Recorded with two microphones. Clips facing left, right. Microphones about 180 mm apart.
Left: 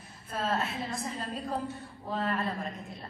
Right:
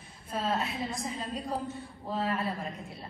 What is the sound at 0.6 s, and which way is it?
Speech, centre (ahead or behind).